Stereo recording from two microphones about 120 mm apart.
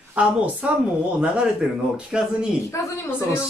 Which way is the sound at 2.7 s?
25° left (ahead or behind).